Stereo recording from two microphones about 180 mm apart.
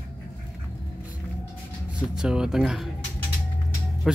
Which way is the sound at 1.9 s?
5° right (ahead or behind).